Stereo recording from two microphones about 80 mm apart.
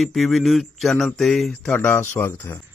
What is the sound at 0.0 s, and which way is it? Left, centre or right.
Mantra, centre.